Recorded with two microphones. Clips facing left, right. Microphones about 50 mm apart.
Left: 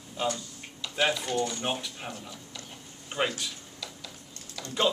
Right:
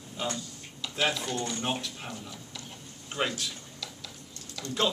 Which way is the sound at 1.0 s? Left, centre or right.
Centre.